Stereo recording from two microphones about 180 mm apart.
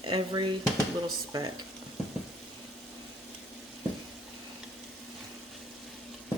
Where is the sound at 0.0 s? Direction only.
25° right (ahead or behind).